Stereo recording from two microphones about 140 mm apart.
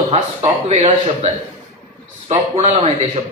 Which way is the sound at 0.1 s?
50° right (ahead or behind).